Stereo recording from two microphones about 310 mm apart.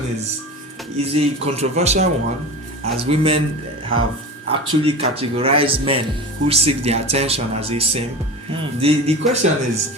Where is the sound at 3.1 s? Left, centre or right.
Centre.